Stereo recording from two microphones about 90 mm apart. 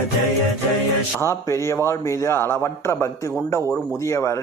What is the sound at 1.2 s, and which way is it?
A man's voice, 30° left (ahead or behind).